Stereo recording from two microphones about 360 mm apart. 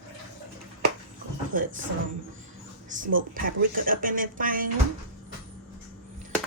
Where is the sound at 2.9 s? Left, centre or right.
Right.